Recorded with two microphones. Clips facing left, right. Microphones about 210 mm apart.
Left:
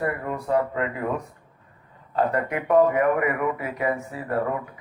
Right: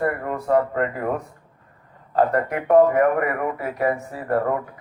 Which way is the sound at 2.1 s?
45° right (ahead or behind).